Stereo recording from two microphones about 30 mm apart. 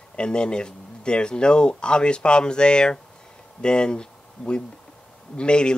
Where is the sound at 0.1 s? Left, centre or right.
Left.